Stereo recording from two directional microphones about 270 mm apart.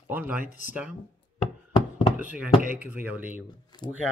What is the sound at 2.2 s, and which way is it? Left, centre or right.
Speech, centre.